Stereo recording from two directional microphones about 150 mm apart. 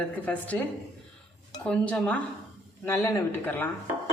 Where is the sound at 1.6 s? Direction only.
10° left (ahead or behind).